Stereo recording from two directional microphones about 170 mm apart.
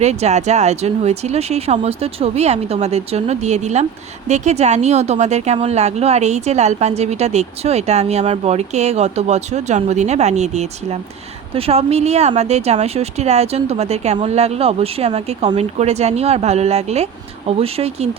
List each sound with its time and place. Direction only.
0.0 s a woman's voice: 40° right (ahead or behind)